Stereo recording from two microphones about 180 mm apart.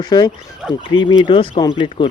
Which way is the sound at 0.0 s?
20° left (ahead or behind).